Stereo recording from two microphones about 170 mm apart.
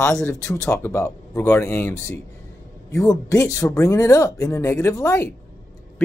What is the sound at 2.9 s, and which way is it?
Speech, 20° left (ahead or behind).